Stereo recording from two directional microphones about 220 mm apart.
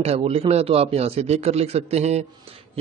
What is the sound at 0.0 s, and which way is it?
A man's voice, 25° right (ahead or behind).